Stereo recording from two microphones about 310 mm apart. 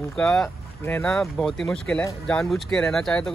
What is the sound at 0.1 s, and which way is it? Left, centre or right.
Speech, centre.